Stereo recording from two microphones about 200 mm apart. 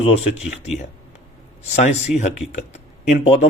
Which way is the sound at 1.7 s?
35° left (ahead or behind).